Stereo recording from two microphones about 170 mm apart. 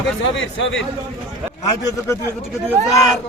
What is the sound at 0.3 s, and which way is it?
Speech, 90° left.